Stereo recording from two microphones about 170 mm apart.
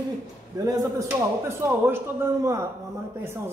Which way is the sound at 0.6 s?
20° right (ahead or behind).